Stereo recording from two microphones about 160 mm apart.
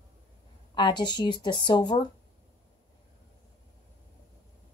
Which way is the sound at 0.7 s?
30° left (ahead or behind).